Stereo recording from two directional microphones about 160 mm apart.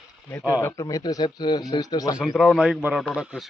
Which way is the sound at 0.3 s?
10° left (ahead or behind).